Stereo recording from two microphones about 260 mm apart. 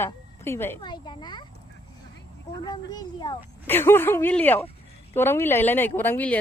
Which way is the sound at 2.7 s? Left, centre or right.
Centre.